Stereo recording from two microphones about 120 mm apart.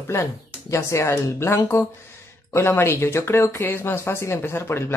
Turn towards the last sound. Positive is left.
turn(degrees=20)  # may be behind; listen again after turning